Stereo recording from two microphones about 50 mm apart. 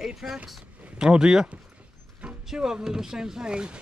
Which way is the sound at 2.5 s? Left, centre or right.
Centre.